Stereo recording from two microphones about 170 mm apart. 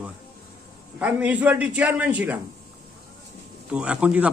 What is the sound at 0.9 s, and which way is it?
A man's voice, 10° right (ahead or behind).